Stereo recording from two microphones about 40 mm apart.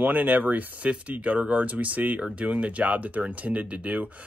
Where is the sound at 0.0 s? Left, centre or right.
Right.